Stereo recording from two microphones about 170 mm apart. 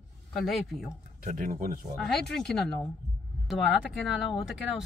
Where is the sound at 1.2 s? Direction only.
55° right (ahead or behind).